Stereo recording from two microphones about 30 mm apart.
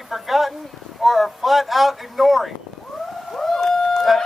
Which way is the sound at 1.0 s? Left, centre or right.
Centre.